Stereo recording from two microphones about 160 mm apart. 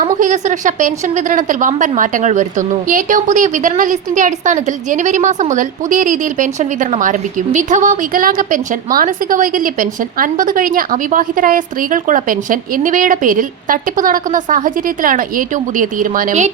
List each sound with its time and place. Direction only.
0.0 s a woman's voice: 50° right (ahead or behind)